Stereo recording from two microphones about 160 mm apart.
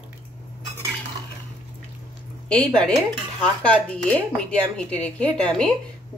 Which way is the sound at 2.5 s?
5° left (ahead or behind).